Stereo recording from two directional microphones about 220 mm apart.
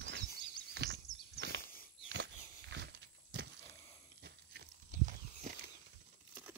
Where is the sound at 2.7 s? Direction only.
50° right (ahead or behind).